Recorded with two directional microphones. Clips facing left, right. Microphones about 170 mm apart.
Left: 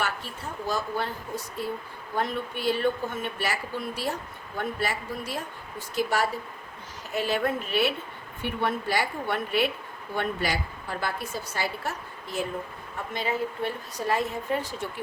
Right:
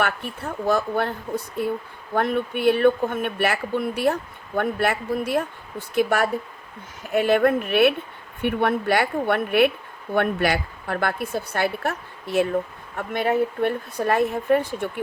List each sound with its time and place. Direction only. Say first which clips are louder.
0.0 s a woman's voice: right 6 dB; 60° right (ahead or behind)